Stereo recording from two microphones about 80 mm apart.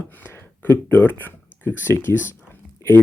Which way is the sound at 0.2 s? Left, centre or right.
Left.